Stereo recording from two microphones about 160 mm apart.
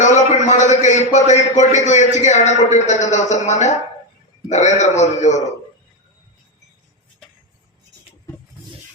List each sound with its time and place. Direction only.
0.0 s a man's voice: 45° left (ahead or behind)